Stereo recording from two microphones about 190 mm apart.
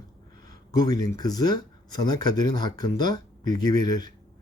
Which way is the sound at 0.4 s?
20° left (ahead or behind).